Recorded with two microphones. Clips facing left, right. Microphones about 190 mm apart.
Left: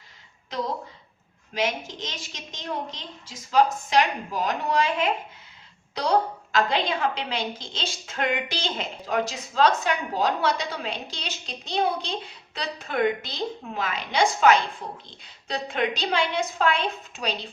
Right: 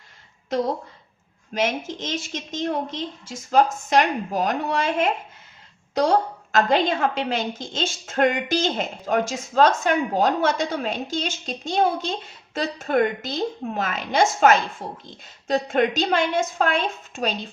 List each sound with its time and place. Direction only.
1.5 s a woman's voice: 50° right (ahead or behind)